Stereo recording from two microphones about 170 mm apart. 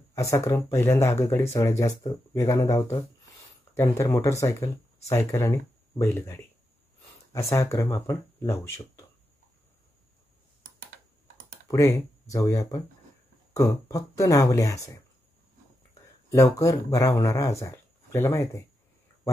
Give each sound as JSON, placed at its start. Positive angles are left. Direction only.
{"t": 0.1, "sound": "speech", "side_deg": 15}
{"t": 11.6, "sound": "speech", "side_deg": 20}
{"t": 16.3, "sound": "speech", "side_deg": 20}